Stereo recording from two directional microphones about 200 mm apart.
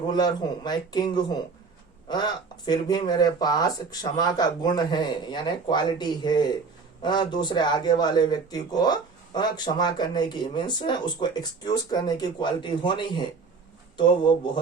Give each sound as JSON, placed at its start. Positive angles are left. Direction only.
{"t": 0.1, "sound": "speech", "side_deg": 20}